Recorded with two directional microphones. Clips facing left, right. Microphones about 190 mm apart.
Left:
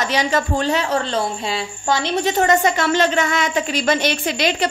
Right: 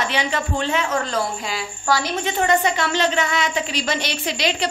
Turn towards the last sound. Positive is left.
turn(degrees=50)  # may be behind; listen again after turning